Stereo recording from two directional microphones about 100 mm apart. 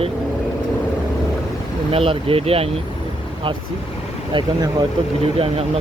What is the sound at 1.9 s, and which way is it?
Speech, 70° right (ahead or behind).